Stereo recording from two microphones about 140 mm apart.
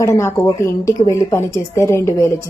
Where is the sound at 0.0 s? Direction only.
20° left (ahead or behind).